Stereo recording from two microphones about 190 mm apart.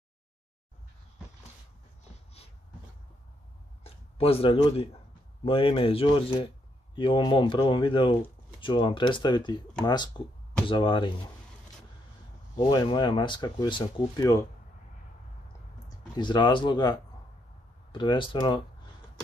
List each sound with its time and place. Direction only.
3.8 s a sound: 30° left (ahead or behind)
5.4 s speech: 30° left (ahead or behind)
12.5 s speech: 25° left (ahead or behind)
16.2 s speech: 25° left (ahead or behind)